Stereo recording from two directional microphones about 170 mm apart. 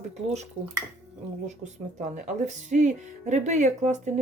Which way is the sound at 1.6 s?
45° right (ahead or behind).